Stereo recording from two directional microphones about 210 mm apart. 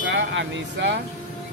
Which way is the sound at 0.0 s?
60° right (ahead or behind).